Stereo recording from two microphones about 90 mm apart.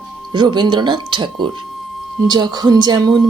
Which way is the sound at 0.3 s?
55° right (ahead or behind).